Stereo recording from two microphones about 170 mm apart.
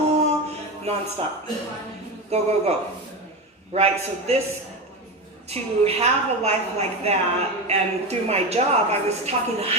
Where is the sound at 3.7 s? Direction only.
40° right (ahead or behind).